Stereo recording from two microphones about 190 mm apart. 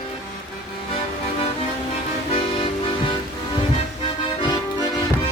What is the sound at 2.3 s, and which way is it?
Music, 25° left (ahead or behind).